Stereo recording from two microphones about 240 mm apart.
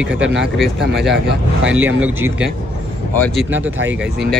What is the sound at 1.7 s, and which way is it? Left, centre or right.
Speech, right.